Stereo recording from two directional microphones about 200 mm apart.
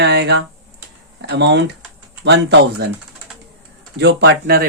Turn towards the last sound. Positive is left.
turn(degrees=-55)  # may be behind; listen again after turning